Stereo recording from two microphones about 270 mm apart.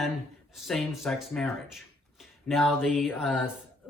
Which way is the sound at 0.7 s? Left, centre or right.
Centre.